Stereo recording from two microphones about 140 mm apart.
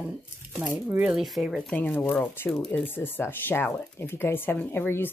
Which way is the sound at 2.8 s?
15° left (ahead or behind).